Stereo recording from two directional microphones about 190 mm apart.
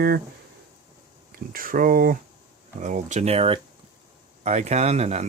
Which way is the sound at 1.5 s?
45° right (ahead or behind).